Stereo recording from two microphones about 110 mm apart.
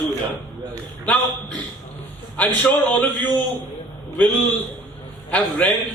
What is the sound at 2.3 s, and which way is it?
A man's voice, 15° left (ahead or behind).